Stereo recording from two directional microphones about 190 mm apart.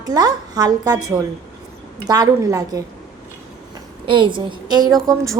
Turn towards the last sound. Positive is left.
turn(degrees=-15)  # may be behind; listen again after turning